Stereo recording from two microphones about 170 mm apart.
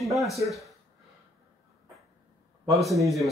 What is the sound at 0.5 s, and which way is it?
Speech, centre (ahead or behind).